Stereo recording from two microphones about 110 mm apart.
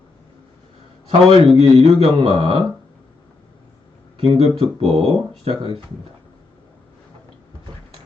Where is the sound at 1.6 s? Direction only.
65° right (ahead or behind).